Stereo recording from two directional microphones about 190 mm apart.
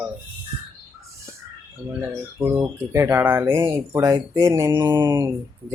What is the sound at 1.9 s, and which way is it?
Speech, 10° right (ahead or behind).